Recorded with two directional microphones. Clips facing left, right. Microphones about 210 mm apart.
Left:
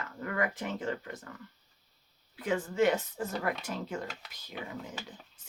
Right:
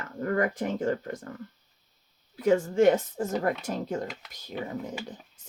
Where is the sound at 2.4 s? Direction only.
45° right (ahead or behind).